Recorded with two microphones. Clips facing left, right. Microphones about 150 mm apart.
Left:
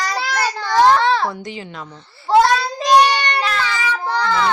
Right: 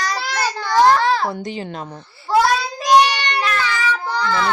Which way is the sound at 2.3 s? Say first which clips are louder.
Left 3 dB; 25° left (ahead or behind).